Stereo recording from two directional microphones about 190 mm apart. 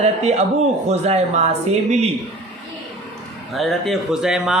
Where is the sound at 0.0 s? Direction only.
35° right (ahead or behind).